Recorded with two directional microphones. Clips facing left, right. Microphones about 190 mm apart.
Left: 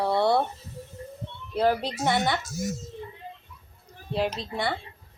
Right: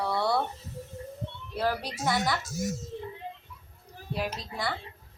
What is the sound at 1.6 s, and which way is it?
Speech, 25° left (ahead or behind).